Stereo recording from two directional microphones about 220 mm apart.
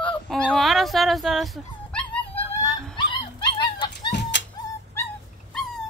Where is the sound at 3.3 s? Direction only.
20° left (ahead or behind).